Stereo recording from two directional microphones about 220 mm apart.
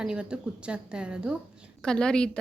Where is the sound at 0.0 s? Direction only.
5° right (ahead or behind).